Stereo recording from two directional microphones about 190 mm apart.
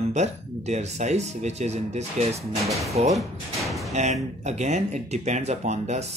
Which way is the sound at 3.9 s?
35° right (ahead or behind).